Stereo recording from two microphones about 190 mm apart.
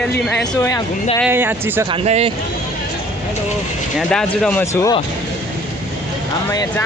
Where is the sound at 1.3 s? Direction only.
10° right (ahead or behind).